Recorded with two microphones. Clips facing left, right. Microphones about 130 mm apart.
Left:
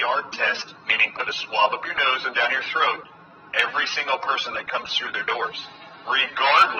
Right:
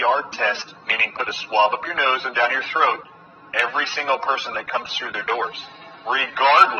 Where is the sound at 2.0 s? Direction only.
40° right (ahead or behind).